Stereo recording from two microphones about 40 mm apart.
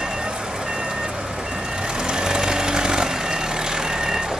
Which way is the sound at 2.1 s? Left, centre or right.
Centre.